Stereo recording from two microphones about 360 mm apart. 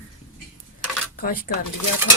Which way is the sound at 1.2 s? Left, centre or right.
Left.